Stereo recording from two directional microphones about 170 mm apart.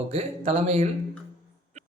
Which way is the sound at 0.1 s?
35° right (ahead or behind).